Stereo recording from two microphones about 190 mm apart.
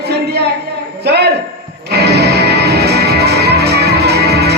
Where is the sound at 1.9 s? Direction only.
60° right (ahead or behind).